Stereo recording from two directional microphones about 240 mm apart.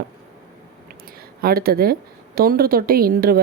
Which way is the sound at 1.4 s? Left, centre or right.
Right.